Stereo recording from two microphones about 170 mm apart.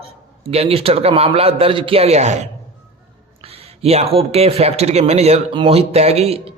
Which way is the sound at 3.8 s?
35° right (ahead or behind).